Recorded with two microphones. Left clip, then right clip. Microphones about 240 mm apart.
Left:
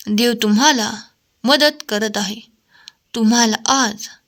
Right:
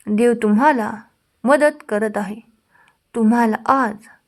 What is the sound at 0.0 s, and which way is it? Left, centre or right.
A woman's voice, left.